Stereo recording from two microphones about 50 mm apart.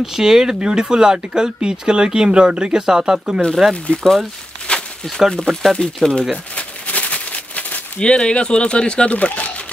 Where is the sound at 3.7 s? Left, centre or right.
Left.